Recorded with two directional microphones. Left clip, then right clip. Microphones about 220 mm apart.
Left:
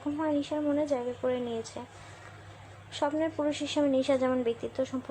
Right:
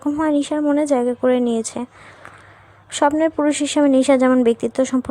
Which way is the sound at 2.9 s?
50° right (ahead or behind).